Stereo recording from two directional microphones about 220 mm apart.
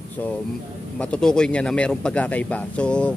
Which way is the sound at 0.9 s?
5° left (ahead or behind).